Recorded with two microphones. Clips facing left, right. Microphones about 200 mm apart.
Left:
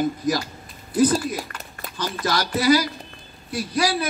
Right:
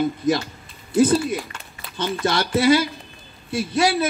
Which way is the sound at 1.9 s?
25° right (ahead or behind).